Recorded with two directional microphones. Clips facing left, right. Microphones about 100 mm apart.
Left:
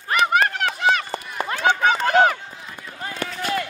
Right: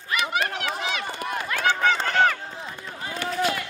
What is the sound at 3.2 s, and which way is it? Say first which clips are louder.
Run: right 1 dB; 40° left (ahead or behind).